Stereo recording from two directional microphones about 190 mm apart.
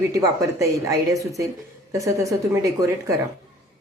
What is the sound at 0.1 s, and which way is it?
Speech, 15° right (ahead or behind).